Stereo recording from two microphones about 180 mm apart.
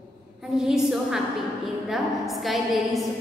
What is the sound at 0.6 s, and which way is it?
A woman's voice, centre (ahead or behind).